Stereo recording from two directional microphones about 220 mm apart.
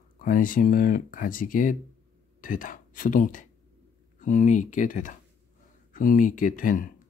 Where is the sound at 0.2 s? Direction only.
40° left (ahead or behind).